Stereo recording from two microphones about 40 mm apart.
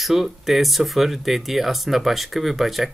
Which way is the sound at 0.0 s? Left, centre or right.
Centre.